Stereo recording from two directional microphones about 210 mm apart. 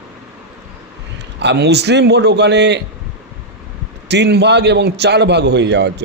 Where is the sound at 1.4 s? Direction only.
55° right (ahead or behind).